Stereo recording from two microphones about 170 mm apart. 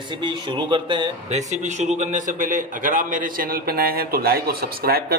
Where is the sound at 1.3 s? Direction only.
45° right (ahead or behind); by 5.1 s 65° right (ahead or behind).